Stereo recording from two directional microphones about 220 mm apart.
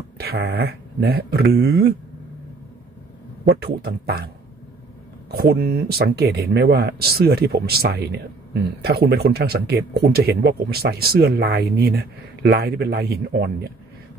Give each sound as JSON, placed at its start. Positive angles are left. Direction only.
{"t": 0.2, "sound": "speech", "side_deg": -45}
{"t": 3.4, "sound": "speech", "side_deg": -45}
{"t": 5.3, "sound": "speech", "side_deg": -45}